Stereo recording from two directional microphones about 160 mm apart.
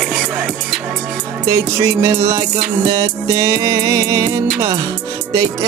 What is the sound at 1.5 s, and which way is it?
Music, 20° right (ahead or behind).